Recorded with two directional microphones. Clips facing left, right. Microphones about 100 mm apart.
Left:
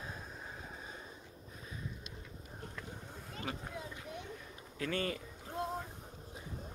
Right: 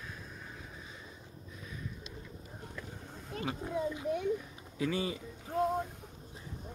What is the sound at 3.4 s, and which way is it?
A child's voice, 15° right (ahead or behind).